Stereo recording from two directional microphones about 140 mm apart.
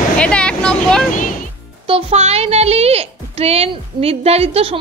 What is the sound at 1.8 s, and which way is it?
Speech, 45° right (ahead or behind).